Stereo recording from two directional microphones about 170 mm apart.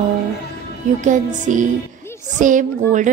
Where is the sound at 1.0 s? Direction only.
45° right (ahead or behind).